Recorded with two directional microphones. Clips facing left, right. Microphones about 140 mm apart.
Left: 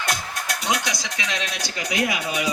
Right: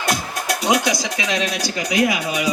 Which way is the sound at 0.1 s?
15° right (ahead or behind).